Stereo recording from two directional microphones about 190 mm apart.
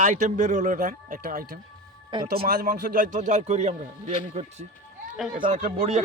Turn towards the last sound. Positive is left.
turn(degrees=-40)  # may be behind; listen again after turning